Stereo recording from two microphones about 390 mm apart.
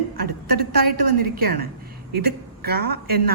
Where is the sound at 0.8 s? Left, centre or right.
Right.